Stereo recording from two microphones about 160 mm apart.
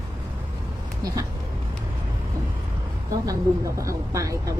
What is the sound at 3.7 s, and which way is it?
Speech, 20° right (ahead or behind).